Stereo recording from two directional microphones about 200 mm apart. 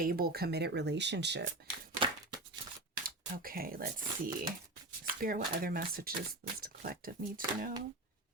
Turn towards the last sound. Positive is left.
turn(degrees=-45)  # may be behind; listen again after turning